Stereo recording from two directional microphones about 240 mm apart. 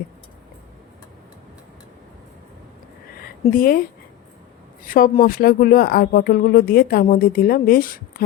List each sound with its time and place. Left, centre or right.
3.4 s speech: left